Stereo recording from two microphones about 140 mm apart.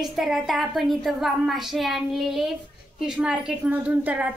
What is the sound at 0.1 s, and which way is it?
A woman's voice, centre (ahead or behind).